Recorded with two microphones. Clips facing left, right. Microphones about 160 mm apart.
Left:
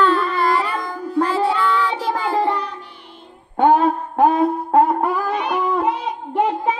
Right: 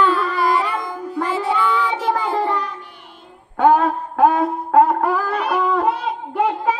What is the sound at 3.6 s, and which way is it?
Music, 30° left (ahead or behind).